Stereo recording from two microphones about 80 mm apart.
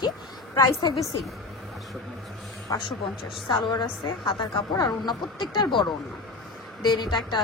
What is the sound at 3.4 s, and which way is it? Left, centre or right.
A woman's voice, left.